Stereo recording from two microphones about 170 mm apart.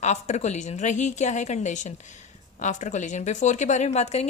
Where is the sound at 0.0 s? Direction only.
45° left (ahead or behind).